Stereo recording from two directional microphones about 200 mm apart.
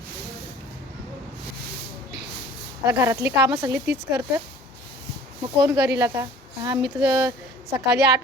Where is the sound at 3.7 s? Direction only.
55° right (ahead or behind).